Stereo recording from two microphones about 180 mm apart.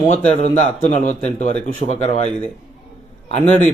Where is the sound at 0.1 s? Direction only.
40° left (ahead or behind).